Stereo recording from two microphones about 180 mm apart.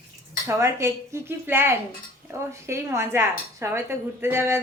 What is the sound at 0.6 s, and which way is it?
Speech, 15° right (ahead or behind).